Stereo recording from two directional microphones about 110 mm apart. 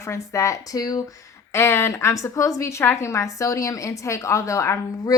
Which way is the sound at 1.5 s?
25° left (ahead or behind).